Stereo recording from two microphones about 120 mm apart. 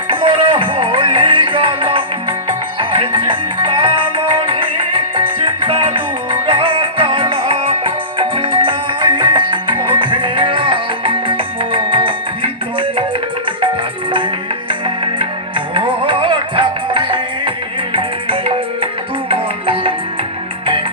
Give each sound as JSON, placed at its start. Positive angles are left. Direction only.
{"t": 0.1, "sound": "music", "side_deg": -45}
{"t": 14.7, "sound": "music", "side_deg": -45}